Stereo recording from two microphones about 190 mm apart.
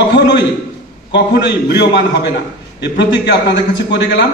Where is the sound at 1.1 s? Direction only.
65° left (ahead or behind).